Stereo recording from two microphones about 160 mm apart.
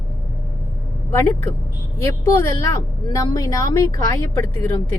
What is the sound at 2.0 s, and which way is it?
A woman's voice, 20° left (ahead or behind).